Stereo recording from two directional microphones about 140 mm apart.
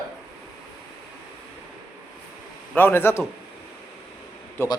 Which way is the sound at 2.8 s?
15° left (ahead or behind).